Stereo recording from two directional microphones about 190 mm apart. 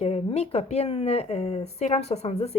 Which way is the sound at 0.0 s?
35° left (ahead or behind).